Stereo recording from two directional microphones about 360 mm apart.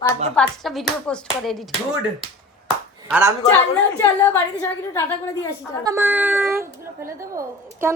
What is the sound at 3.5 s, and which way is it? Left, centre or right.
Speech, centre.